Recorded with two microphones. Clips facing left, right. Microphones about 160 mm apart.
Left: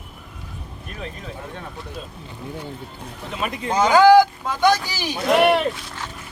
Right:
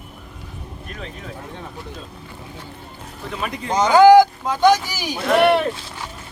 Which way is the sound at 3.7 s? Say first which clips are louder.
Right 2 dB; 15° right (ahead or behind).